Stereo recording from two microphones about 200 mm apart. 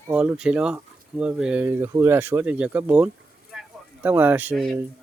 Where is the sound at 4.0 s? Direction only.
10° right (ahead or behind).